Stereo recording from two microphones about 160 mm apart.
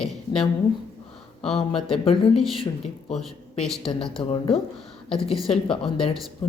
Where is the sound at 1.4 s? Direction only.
40° left (ahead or behind).